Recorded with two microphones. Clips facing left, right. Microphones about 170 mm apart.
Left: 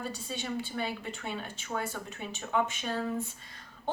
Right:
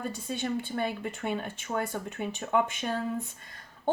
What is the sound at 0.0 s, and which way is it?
A woman's voice, 50° right (ahead or behind).